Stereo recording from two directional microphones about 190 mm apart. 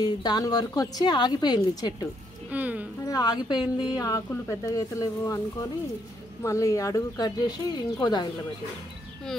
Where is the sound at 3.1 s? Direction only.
20° left (ahead or behind).